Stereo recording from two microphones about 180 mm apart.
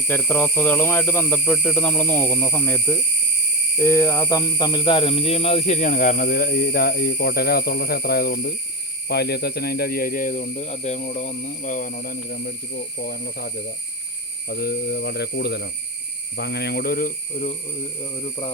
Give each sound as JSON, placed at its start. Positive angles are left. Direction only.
{"t": 0.1, "sound": "speech", "side_deg": 10}